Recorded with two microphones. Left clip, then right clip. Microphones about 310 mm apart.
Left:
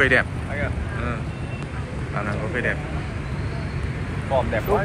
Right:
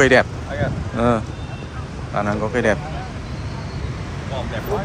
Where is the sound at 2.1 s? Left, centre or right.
Centre.